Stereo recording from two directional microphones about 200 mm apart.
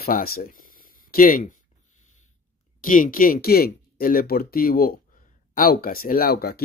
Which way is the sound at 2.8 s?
40° left (ahead or behind).